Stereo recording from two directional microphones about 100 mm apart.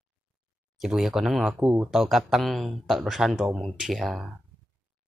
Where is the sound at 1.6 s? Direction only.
15° right (ahead or behind).